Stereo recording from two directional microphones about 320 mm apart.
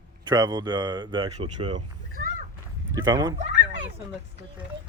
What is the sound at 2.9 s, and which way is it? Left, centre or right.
Speech, centre.